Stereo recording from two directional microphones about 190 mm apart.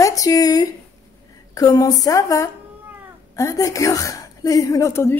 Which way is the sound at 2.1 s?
15° left (ahead or behind).